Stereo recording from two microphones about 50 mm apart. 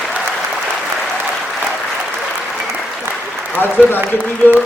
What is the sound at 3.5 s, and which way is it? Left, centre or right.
Speech, left.